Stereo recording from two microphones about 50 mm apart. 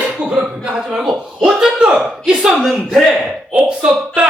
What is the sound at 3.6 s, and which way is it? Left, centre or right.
Speech, right.